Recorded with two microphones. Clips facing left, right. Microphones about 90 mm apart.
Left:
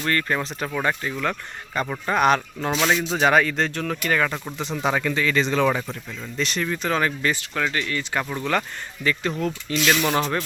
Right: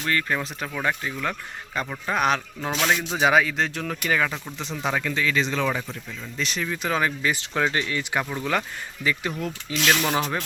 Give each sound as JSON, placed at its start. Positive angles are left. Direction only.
{"t": 0.0, "sound": "speech", "side_deg": -5}
{"t": 7.3, "sound": "speech", "side_deg": -25}
{"t": 7.9, "sound": "speech", "side_deg": -10}